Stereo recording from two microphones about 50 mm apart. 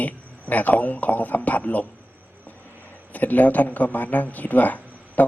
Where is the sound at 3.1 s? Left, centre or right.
Left.